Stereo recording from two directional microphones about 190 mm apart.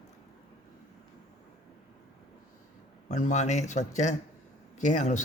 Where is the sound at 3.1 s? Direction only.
40° left (ahead or behind).